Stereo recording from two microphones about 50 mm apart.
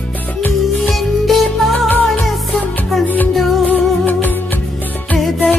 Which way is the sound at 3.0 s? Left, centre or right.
Left.